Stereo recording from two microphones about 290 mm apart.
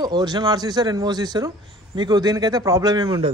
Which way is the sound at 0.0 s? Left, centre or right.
Centre.